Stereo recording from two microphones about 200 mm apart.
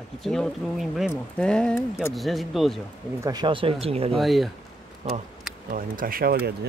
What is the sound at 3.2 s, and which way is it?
Speech, 20° right (ahead or behind).